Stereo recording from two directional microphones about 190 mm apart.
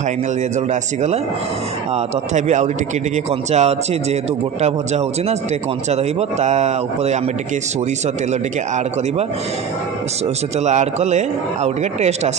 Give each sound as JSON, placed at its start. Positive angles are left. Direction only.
{"t": 0.7, "sound": "a man's voice", "side_deg": -35}
{"t": 2.3, "sound": "a man's voice", "side_deg": -40}
{"t": 10.6, "sound": "a man's voice", "side_deg": -35}